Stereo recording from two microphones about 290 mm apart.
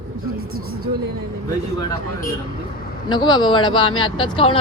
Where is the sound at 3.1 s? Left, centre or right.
Centre.